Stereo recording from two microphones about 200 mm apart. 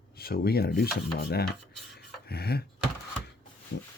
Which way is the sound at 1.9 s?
55° left (ahead or behind).